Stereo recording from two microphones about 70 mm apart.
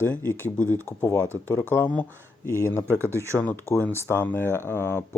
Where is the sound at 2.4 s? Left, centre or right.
Left.